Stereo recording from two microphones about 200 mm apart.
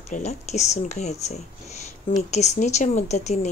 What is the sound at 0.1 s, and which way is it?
Speech, 35° left (ahead or behind).